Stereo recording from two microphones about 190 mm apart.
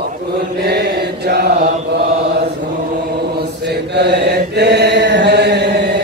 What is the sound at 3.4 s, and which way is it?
Mantra, 60° right (ahead or behind).